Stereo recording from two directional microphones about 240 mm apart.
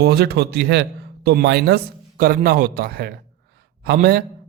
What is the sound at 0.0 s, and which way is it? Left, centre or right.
A man's voice, right.